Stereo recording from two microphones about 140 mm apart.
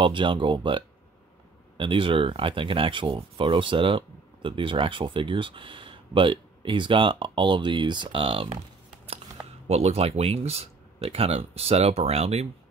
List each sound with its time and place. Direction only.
0.0 s speech: 35° right (ahead or behind)
9.7 s speech: 50° right (ahead or behind)